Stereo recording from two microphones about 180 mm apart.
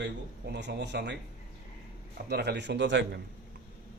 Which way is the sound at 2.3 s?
65° right (ahead or behind).